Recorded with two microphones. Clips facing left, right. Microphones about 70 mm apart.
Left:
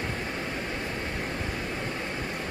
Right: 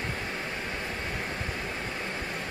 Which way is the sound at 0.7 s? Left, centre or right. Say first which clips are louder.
Left 1 dB; centre.